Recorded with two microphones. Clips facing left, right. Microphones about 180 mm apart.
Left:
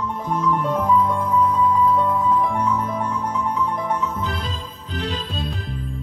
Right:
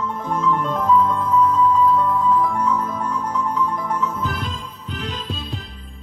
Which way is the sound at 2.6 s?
30° left (ahead or behind).